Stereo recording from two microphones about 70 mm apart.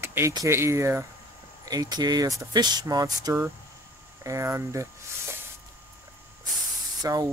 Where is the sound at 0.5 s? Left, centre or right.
Right.